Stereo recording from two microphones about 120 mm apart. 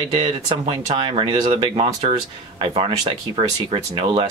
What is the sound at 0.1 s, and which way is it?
Speech, 45° right (ahead or behind).